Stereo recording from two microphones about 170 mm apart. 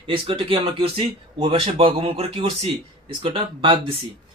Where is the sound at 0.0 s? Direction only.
30° right (ahead or behind).